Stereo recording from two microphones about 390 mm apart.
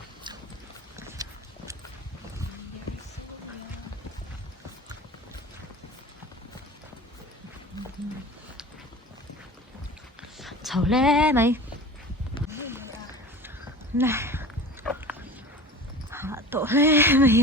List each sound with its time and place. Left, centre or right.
0.3 s boat: centre
0.9 s clip-clop: centre
7.7 s a sound: centre
10.3 s speech: centre
12.5 s basketball bounce: centre
14.0 s a sound: centre
14.8 s dog: centre
16.0 s dog: centre